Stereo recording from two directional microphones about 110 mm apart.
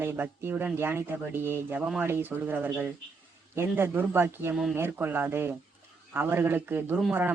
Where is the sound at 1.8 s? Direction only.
10° right (ahead or behind).